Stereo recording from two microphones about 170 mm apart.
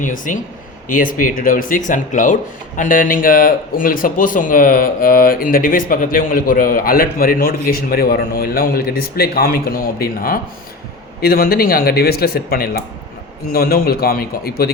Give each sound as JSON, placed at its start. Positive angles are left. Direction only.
{"t": 0.0, "sound": "speech", "side_deg": 50}